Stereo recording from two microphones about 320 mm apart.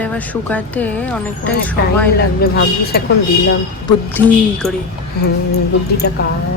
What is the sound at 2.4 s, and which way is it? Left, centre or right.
Speech, left.